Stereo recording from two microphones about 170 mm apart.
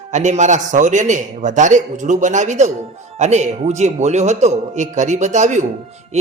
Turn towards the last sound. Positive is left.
turn(degrees=-45)  # may be behind; listen again after turning